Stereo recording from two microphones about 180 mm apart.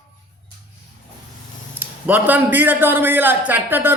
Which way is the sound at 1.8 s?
10° right (ahead or behind).